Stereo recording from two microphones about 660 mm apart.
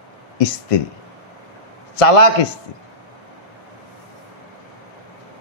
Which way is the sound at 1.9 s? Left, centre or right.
Left.